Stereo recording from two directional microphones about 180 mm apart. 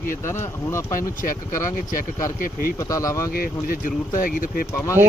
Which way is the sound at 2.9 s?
20° left (ahead or behind).